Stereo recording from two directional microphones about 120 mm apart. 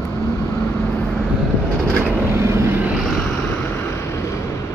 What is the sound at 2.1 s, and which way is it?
Vehicle, 20° right (ahead or behind).